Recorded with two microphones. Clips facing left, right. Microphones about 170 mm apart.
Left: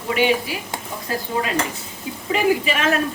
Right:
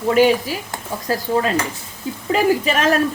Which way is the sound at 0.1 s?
40° right (ahead or behind).